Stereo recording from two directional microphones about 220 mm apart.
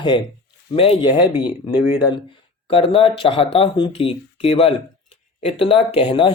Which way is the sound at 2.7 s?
25° left (ahead or behind).